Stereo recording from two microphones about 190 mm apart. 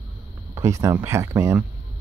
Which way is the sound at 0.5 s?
15° right (ahead or behind).